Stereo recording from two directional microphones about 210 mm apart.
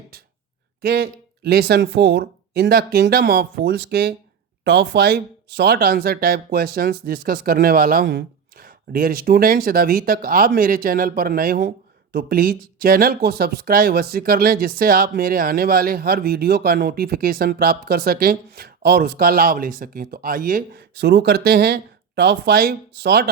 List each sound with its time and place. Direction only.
0.8 s speech: 50° right (ahead or behind)